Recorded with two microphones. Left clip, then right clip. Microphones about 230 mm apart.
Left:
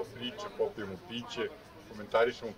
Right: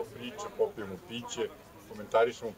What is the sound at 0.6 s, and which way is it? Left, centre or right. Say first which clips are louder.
Speech: right 3 dB; right.